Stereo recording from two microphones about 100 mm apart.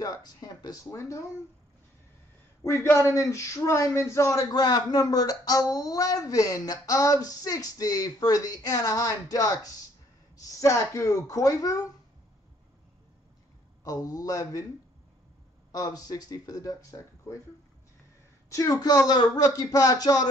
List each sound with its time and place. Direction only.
0.0 s speech: 40° left (ahead or behind)
2.6 s speech: 30° left (ahead or behind)
13.8 s speech: 40° left (ahead or behind)
15.7 s speech: 40° left (ahead or behind)
18.5 s speech: 35° left (ahead or behind)